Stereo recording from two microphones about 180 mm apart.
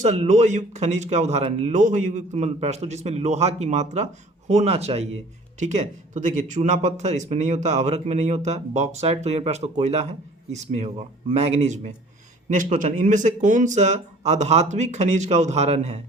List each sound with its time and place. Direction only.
0.0 s speech: 40° right (ahead or behind)